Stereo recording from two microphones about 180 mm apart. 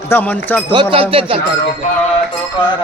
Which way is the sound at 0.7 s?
30° right (ahead or behind).